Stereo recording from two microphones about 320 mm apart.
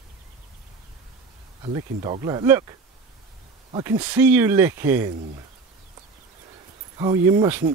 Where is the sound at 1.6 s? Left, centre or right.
Centre.